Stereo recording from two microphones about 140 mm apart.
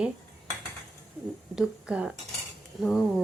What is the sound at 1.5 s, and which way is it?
Speech, 10° right (ahead or behind).